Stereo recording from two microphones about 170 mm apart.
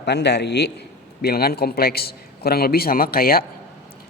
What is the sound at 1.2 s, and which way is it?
A man's voice, 65° left (ahead or behind).